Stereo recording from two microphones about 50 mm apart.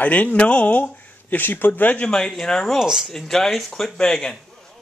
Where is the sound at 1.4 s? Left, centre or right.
Left.